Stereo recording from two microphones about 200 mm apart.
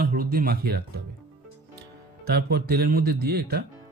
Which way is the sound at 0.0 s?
50° right (ahead or behind).